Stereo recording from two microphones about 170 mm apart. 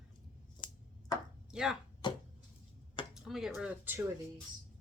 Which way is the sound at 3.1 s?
Centre (ahead or behind).